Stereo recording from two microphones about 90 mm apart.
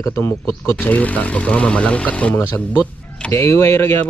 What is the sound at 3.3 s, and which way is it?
Speech, 30° left (ahead or behind).